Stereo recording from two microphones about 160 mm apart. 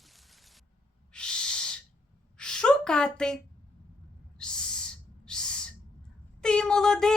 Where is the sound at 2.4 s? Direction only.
5° left (ahead or behind).